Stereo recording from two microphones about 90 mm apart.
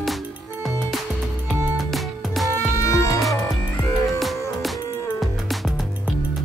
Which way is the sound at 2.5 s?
35° left (ahead or behind).